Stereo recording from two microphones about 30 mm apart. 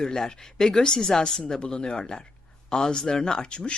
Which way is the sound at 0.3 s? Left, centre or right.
Left.